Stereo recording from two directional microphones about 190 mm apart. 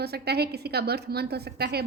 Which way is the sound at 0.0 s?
55° right (ahead or behind).